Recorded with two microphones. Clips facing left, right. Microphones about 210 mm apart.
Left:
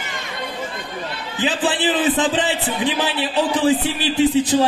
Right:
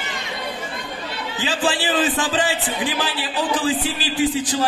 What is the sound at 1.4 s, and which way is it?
A man's voice, 20° left (ahead or behind).